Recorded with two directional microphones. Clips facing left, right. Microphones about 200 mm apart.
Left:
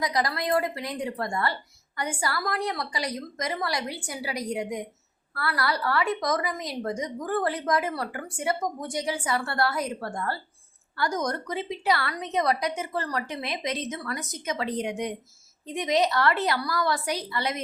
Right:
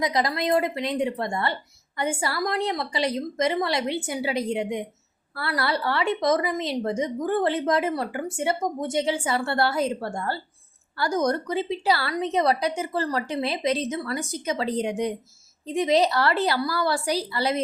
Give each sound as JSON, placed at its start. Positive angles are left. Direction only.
{"t": 0.0, "sound": "a woman's voice", "side_deg": -25}